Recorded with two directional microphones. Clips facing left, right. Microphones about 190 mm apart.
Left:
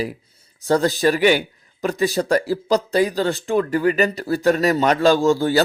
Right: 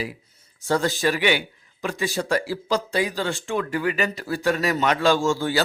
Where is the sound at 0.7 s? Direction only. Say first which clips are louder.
Left 5 dB; 35° left (ahead or behind).